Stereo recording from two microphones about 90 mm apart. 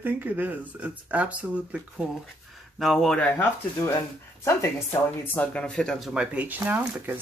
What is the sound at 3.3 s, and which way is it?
Speech, 30° left (ahead or behind).